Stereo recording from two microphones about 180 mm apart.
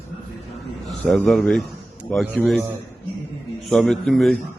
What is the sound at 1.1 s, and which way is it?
A man's voice, 5° left (ahead or behind).